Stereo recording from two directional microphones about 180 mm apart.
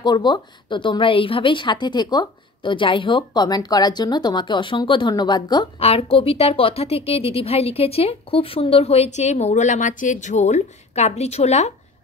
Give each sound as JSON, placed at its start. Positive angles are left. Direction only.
{"t": 0.0, "sound": "a woman's voice", "side_deg": 25}